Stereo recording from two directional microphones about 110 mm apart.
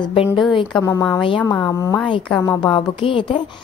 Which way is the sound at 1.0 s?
45° left (ahead or behind).